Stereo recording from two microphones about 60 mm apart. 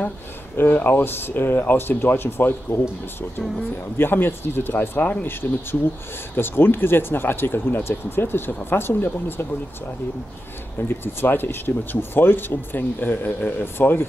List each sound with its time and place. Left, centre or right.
0.6 s speech: left
4.0 s speech: left
6.3 s speech: left
10.8 s speech: left